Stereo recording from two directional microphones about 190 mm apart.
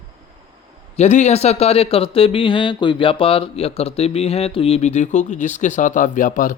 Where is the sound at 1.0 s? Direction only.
35° left (ahead or behind).